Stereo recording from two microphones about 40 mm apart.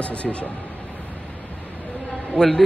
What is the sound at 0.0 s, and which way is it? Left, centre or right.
Speech, left.